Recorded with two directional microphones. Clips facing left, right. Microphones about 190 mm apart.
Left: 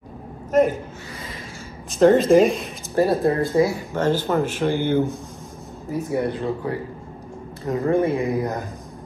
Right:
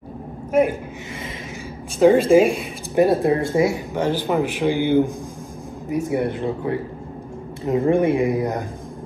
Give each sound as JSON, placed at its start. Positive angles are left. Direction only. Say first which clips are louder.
{"t": 0.5, "sound": "speech", "louder": "even", "side_deg": -10}
{"t": 2.0, "sound": "speech", "louder": "right 1 dB", "side_deg": -10}
{"t": 3.1, "sound": "speech", "louder": "right 1 dB", "side_deg": -20}